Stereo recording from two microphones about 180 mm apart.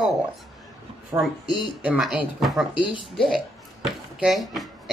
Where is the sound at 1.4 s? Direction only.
25° left (ahead or behind).